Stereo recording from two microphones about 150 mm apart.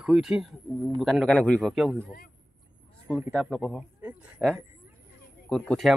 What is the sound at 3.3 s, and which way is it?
Speech, 5° left (ahead or behind).